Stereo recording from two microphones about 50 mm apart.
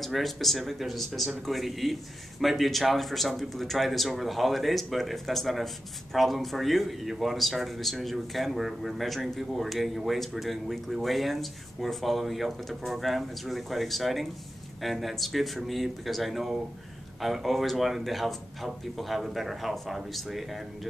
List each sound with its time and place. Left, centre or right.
0.0 s a man's voice: centre